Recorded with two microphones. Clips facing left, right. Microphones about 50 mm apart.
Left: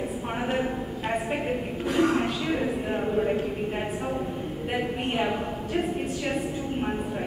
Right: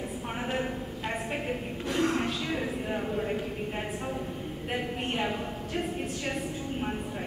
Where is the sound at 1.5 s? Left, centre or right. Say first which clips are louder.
Left 4 dB; centre.